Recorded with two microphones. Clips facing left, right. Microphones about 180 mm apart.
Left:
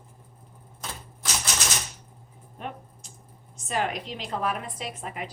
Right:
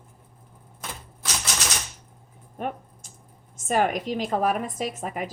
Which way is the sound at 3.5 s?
50° right (ahead or behind).